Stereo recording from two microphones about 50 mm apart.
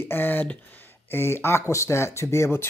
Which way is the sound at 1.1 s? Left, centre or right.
Left.